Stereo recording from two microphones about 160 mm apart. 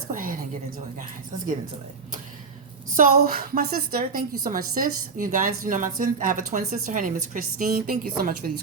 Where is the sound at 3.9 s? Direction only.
65° right (ahead or behind).